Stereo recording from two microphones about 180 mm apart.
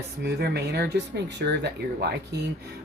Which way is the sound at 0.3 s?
65° right (ahead or behind).